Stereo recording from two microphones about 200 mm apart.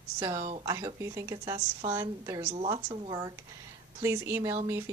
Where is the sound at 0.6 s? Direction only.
15° right (ahead or behind).